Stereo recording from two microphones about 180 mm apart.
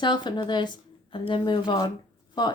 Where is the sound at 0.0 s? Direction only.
25° left (ahead or behind).